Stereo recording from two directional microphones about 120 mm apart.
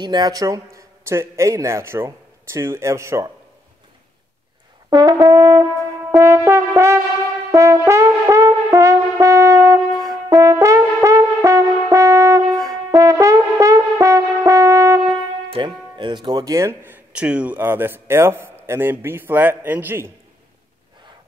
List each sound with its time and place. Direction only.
0.0 s a man's voice: 35° right (ahead or behind)
4.8 s brass instrument: 30° right (ahead or behind)
6.1 s a man's voice: 20° right (ahead or behind)
7.5 s brass instrument: 25° right (ahead or behind)
15.5 s speech: 40° right (ahead or behind); by 20.1 s 15° right (ahead or behind)